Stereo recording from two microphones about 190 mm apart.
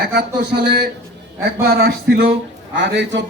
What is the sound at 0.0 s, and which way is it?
A man's voice, 60° right (ahead or behind).